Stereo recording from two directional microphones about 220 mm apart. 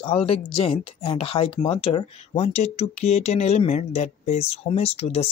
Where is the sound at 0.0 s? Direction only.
25° left (ahead or behind).